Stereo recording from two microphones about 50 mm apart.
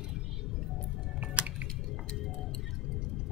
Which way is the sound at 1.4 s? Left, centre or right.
Right.